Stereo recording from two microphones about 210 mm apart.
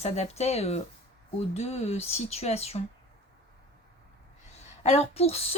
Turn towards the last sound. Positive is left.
turn(degrees=30)  # may be behind; listen again after turning